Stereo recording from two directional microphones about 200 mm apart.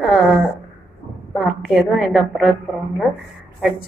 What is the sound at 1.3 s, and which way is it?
A woman's voice, centre (ahead or behind).